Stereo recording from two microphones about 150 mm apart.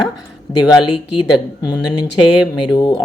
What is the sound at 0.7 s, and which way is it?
Speech, 30° left (ahead or behind).